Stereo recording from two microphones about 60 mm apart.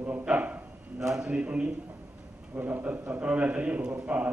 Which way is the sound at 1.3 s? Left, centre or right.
Centre.